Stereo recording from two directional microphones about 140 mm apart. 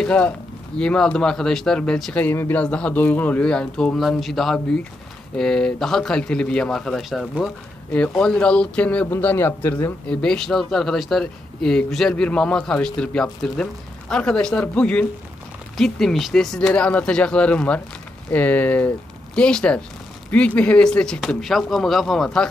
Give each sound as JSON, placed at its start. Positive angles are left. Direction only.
{"t": 0.0, "sound": "speech", "side_deg": 10}